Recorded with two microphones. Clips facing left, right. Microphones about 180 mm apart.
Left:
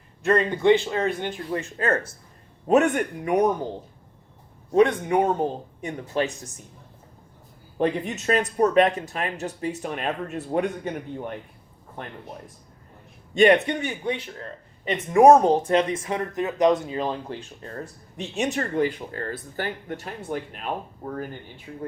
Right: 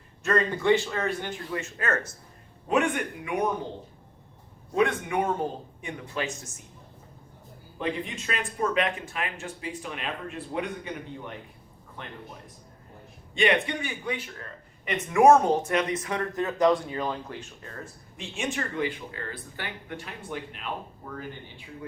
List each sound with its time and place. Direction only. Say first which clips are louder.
0.3 s speech: left 4 dB; 20° left (ahead or behind)
1.5 s speech: left 5 dB; 30° left (ahead or behind)
2.6 s speech: left 6 dB; 40° left (ahead or behind)
4.7 s speech: left 6 dB; 35° left (ahead or behind)
7.8 s speech: left 7 dB; 45° left (ahead or behind)
13.3 s speech: left 7 dB; 40° left (ahead or behind)
13.8 s speech: left 5 dB; 30° left (ahead or behind)